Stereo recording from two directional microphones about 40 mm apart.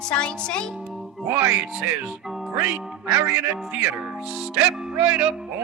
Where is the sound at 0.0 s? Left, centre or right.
Left.